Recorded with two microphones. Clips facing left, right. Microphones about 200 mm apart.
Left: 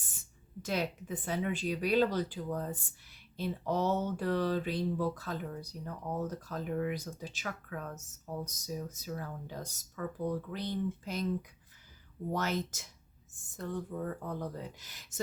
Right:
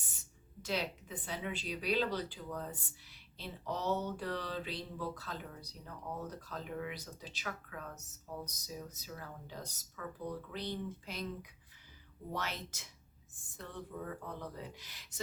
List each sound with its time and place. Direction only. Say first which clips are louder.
0.6 s speech: left 4 dB; 50° left (ahead or behind)
12.3 s speech: left 8 dB; 45° left (ahead or behind)